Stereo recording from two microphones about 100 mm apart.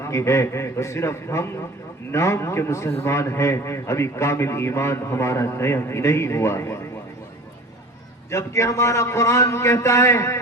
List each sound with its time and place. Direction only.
0.0 s a man's voice: 30° left (ahead or behind)
8.3 s a man's voice: 30° left (ahead or behind)